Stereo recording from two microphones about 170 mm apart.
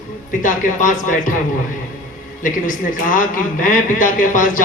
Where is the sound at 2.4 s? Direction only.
50° left (ahead or behind).